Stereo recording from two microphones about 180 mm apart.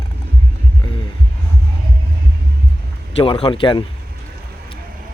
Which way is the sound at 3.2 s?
30° left (ahead or behind).